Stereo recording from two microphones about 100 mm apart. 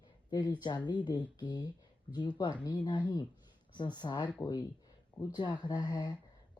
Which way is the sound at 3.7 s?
45° left (ahead or behind).